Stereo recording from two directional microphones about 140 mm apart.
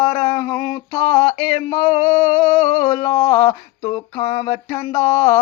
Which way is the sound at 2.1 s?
50° left (ahead or behind).